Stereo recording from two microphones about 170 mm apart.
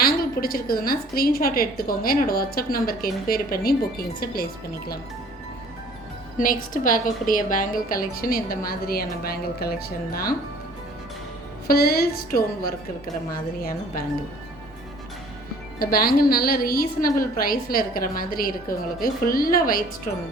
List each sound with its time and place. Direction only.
0.0 s a woman's voice: 60° left (ahead or behind)
6.4 s a woman's voice: 55° left (ahead or behind)
11.7 s a woman's voice: 65° left (ahead or behind)
15.8 s a woman's voice: 60° left (ahead or behind)